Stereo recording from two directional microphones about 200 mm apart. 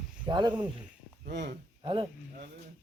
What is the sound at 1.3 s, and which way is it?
Speech, 60° right (ahead or behind).